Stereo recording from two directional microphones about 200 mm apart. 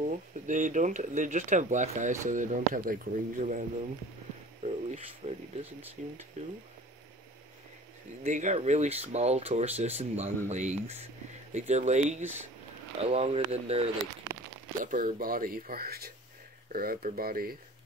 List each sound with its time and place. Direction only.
0.0 s speech: 40° right (ahead or behind)
4.6 s a sound: 30° right (ahead or behind)
6.0 s speech: 40° right (ahead or behind)
8.2 s speech: 35° right (ahead or behind)
14.9 s speech: 45° right (ahead or behind)